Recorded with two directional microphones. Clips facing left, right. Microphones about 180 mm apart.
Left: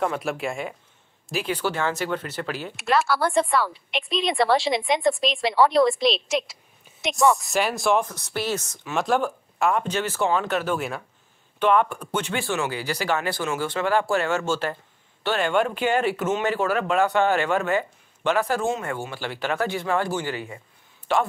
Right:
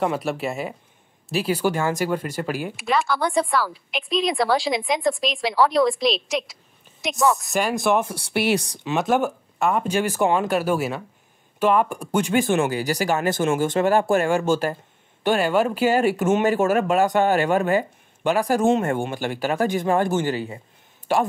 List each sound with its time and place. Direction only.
0.0 s a woman's voice: centre (ahead or behind)
2.8 s a woman's voice: centre (ahead or behind); by 9.0 s 15° right (ahead or behind)
9.0 s speech: centre (ahead or behind)
12.5 s speech: 45° right (ahead or behind)
14.2 s speech: 15° right (ahead or behind)
16.0 s speech: 40° right (ahead or behind)
18.2 s speech: 10° right (ahead or behind)
18.8 s speech: 50° right (ahead or behind)
20.3 s a man's voice: 30° right (ahead or behind)